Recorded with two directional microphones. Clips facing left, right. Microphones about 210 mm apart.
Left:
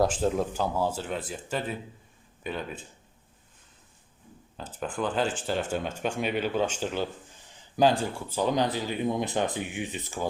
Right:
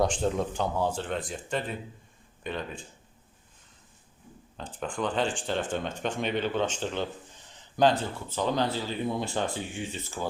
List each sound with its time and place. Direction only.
0.0 s speech: 5° left (ahead or behind)
4.5 s speech: 5° left (ahead or behind)